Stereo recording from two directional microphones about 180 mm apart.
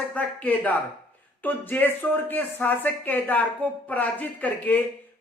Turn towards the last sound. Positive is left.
turn(degrees=10)  # may be behind; listen again after turning